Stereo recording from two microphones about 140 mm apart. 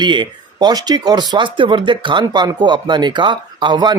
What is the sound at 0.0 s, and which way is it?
Speech, 35° right (ahead or behind).